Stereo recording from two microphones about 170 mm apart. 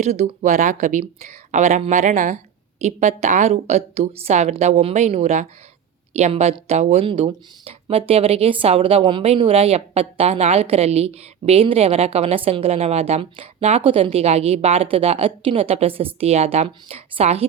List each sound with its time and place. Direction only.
0.0 s speech: 40° right (ahead or behind)